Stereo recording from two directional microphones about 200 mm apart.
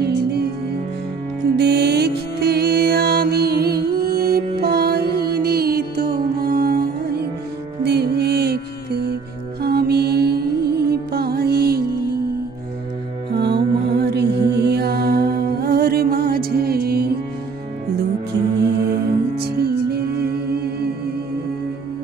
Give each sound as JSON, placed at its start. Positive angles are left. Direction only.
{"t": 0.0, "sound": "music", "side_deg": -55}
{"t": 1.6, "sound": "music", "side_deg": -55}
{"t": 13.3, "sound": "music", "side_deg": -55}
{"t": 18.9, "sound": "music", "side_deg": -55}